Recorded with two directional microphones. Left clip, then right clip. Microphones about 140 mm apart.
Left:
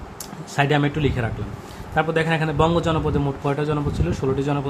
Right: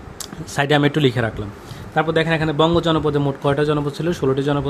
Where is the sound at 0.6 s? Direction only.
60° right (ahead or behind).